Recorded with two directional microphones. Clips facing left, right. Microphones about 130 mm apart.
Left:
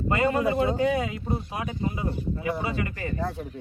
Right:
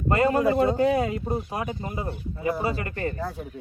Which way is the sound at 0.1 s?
40° right (ahead or behind).